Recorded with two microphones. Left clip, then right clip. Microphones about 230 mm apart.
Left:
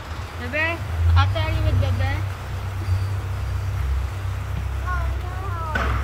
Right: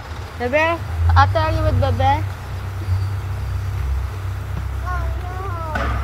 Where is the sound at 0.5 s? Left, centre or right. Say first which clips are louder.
Right 6 dB; centre.